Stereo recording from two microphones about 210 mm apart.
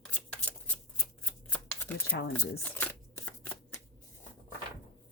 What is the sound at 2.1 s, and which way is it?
Speech, 50° left (ahead or behind).